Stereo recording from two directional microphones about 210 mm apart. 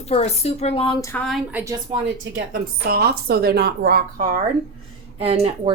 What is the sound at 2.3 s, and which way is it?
A woman's voice, 45° right (ahead or behind).